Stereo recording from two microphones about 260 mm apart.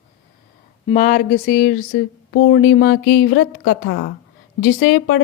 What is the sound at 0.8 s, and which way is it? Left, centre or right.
A woman's voice, left.